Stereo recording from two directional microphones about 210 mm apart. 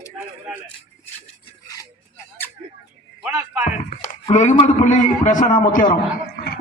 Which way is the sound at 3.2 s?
5° right (ahead or behind).